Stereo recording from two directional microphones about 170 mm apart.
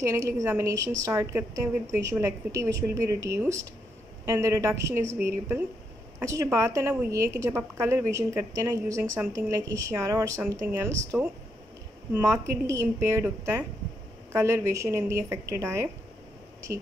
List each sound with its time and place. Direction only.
0.1 s a woman's voice: 15° right (ahead or behind)
6.1 s a woman's voice: 15° right (ahead or behind)